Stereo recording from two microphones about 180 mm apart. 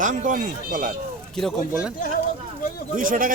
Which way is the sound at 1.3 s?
Centre (ahead or behind).